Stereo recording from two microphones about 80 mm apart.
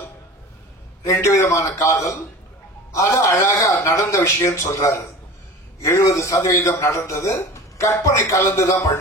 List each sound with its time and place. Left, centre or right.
1.0 s a man's voice: left